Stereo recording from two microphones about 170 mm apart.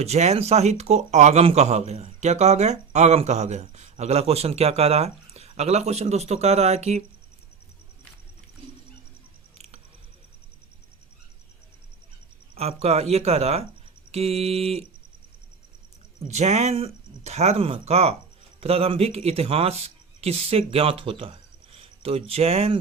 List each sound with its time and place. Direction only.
0.0 s speech: 40° right (ahead or behind)
12.5 s speech: 40° right (ahead or behind)
16.2 s speech: 40° right (ahead or behind)